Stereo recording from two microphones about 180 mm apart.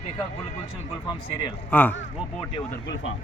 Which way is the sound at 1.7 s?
10° left (ahead or behind).